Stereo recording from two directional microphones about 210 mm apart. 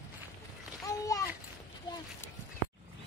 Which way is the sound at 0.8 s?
15° left (ahead or behind).